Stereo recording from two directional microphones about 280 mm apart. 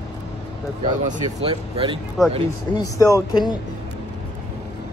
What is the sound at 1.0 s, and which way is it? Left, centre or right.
Speech, centre.